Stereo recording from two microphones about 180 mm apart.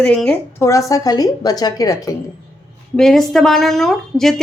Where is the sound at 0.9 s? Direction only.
20° left (ahead or behind).